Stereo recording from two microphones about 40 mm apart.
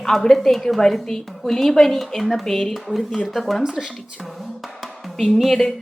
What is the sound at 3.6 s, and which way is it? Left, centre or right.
Speech, centre.